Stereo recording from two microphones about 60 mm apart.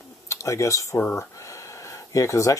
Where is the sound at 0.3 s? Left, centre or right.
Left.